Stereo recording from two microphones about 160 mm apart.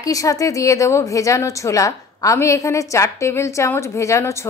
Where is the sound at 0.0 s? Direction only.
20° left (ahead or behind).